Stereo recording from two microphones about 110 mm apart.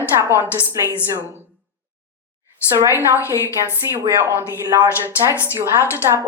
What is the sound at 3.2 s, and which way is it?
Speech, 25° left (ahead or behind).